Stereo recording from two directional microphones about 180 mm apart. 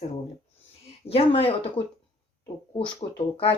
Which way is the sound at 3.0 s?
35° left (ahead or behind).